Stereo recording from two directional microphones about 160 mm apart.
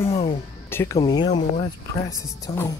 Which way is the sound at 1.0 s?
25° left (ahead or behind).